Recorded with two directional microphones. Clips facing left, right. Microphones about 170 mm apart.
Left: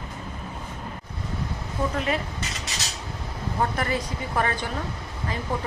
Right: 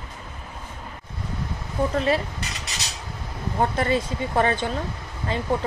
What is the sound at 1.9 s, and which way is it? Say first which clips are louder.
Speech: right 6 dB; 30° right (ahead or behind).